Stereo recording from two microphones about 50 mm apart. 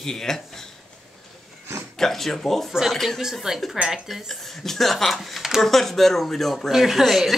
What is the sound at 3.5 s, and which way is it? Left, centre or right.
Speech, centre.